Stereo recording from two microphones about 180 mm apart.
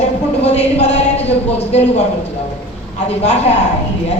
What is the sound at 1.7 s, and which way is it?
Speech, 35° left (ahead or behind).